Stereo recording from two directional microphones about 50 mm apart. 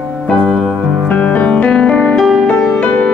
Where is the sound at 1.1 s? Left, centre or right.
Left.